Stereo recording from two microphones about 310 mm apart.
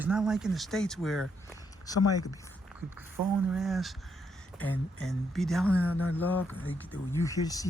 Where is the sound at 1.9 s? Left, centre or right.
Centre.